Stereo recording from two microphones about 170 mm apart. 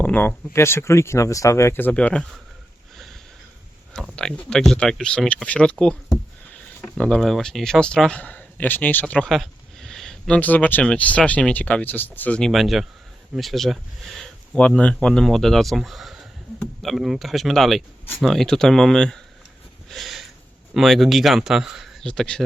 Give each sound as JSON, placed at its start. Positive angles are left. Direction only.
{"t": 0.0, "sound": "speech", "side_deg": 10}
{"t": 2.9, "sound": "sniff", "side_deg": 0}
{"t": 3.9, "sound": "speech", "side_deg": 5}
{"t": 6.8, "sound": "speech", "side_deg": 5}
{"t": 19.9, "sound": "a sound", "side_deg": 0}
{"t": 20.7, "sound": "speech", "side_deg": 0}